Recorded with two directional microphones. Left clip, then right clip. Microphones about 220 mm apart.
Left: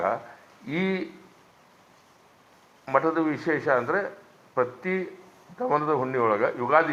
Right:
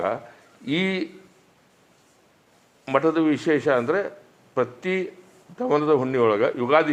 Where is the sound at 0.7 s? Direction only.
45° right (ahead or behind).